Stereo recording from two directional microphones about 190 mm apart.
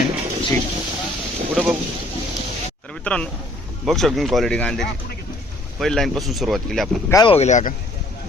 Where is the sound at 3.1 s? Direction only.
10° left (ahead or behind).